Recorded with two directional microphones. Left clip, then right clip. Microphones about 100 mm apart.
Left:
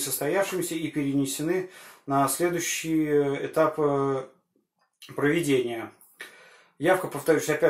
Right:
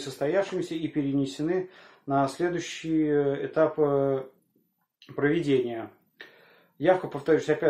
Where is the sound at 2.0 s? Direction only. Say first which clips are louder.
Left 2 dB; 25° right (ahead or behind).